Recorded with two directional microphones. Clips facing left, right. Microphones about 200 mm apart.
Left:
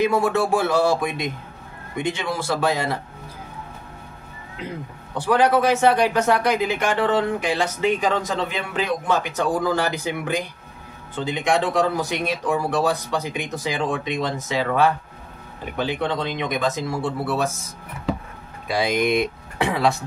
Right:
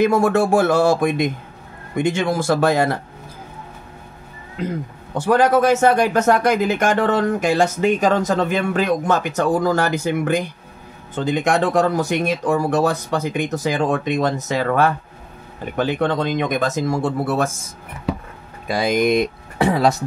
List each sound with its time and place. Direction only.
0.0 s speech: 45° right (ahead or behind)
5.1 s speech: 45° right (ahead or behind)
18.7 s speech: 45° right (ahead or behind)